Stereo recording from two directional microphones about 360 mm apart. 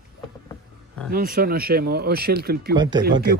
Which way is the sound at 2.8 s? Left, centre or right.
Centre.